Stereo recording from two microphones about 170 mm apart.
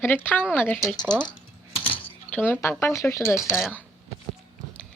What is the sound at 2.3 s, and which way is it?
Speech, 10° left (ahead or behind).